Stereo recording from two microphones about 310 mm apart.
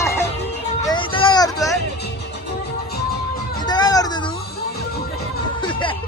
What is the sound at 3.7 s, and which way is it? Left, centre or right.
Children playing, centre.